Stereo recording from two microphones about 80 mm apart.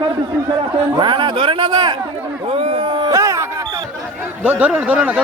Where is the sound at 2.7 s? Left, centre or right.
Right.